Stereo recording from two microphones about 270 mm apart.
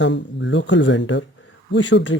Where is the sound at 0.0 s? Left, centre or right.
Left.